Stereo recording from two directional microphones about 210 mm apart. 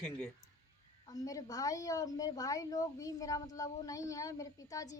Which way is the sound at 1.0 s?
15° left (ahead or behind).